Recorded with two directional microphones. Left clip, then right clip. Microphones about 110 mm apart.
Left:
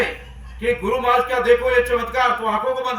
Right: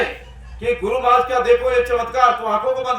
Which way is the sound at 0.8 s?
30° right (ahead or behind).